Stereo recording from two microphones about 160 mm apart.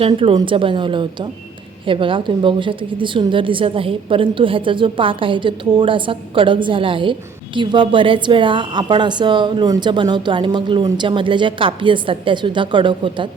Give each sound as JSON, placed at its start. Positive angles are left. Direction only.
{"t": 0.0, "sound": "a woman's voice", "side_deg": -35}